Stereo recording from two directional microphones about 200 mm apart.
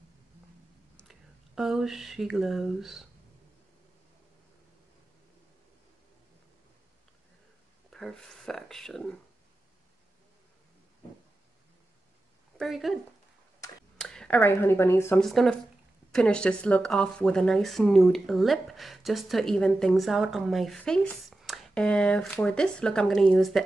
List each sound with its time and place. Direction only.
0.9 s speech: centre (ahead or behind)
7.9 s speech: 5° left (ahead or behind)
12.5 s speech: centre (ahead or behind)
15.2 s speech: centre (ahead or behind)